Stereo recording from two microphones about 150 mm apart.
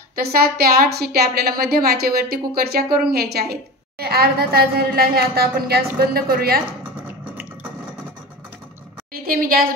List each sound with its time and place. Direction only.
0.1 s a woman's voice: 90° right
9.1 s a woman's voice: 75° right (ahead or behind)